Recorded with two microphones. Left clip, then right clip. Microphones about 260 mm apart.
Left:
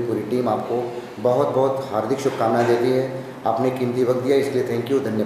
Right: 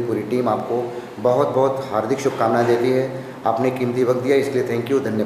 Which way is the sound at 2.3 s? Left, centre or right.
Centre.